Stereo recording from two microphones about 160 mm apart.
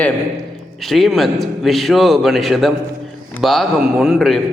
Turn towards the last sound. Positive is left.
turn(degrees=0)  # may be behind; listen again after turning